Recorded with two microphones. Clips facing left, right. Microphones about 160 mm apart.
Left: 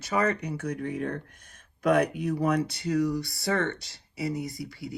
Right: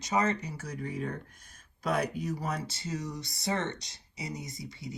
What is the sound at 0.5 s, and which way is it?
Speech, 60° left (ahead or behind).